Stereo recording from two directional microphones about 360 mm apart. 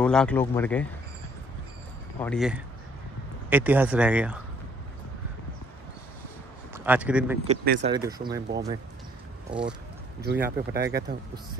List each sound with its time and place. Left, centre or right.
0.0 s speech: centre
2.1 s speech: centre
6.7 s speech: centre
7.4 s speech: right
7.9 s speech: centre